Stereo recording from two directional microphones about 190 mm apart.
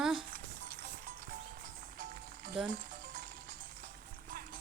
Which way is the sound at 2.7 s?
45° right (ahead or behind).